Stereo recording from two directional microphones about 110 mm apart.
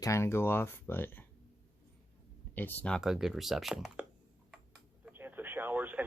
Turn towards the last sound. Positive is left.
turn(degrees=-15)  # may be behind; listen again after turning